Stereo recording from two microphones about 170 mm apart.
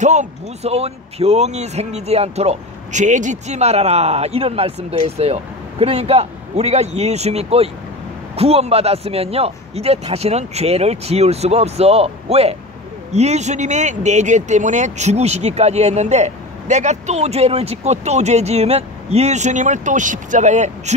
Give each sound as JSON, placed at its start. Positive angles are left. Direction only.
{"t": 0.0, "sound": "speech", "side_deg": -45}